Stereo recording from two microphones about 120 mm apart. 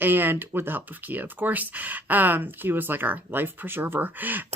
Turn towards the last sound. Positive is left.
turn(degrees=-15)  # may be behind; listen again after turning